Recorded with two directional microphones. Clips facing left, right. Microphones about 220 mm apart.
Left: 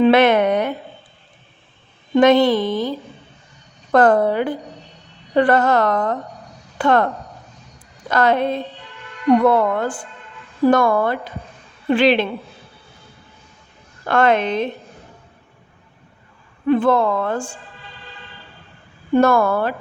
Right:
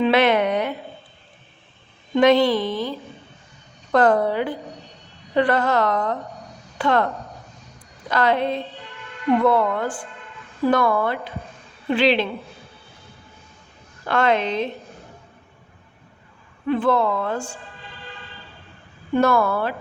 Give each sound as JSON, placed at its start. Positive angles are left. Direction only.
{"t": 0.0, "sound": "speech", "side_deg": 50}
{"t": 2.1, "sound": "a woman's voice", "side_deg": 50}
{"t": 3.9, "sound": "a woman's voice", "side_deg": 50}
{"t": 8.1, "sound": "a woman's voice", "side_deg": 45}
{"t": 14.1, "sound": "a woman's voice", "side_deg": 50}
{"t": 16.6, "sound": "a woman's voice", "side_deg": 45}
{"t": 19.1, "sound": "a woman's voice", "side_deg": 45}